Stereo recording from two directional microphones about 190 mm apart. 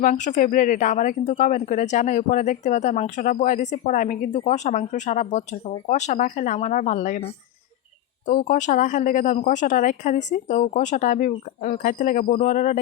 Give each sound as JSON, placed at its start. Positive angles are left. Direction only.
{"t": 0.0, "sound": "speech", "side_deg": 40}
{"t": 8.3, "sound": "speech", "side_deg": 40}